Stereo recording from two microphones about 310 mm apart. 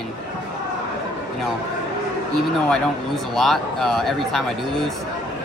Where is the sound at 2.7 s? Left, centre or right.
Centre.